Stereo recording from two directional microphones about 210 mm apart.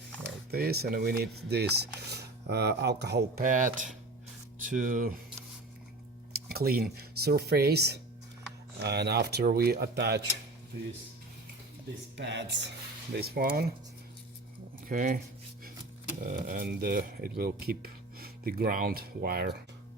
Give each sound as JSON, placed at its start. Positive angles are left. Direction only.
{"t": 0.5, "sound": "speech", "side_deg": -50}
{"t": 6.5, "sound": "speech", "side_deg": -45}
{"t": 12.1, "sound": "speech", "side_deg": -55}
{"t": 14.8, "sound": "speech", "side_deg": -40}
{"t": 16.2, "sound": "speech", "side_deg": -40}